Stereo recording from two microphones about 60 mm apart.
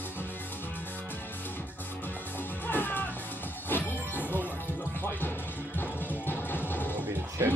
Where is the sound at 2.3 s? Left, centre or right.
Left.